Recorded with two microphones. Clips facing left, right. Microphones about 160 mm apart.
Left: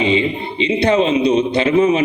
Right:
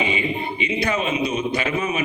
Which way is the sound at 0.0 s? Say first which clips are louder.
Left 7 dB; 30° left (ahead or behind).